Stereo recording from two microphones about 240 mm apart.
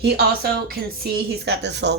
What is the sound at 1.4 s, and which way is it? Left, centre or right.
Speech, right.